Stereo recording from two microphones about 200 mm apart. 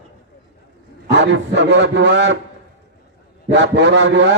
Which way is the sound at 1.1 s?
60° right (ahead or behind).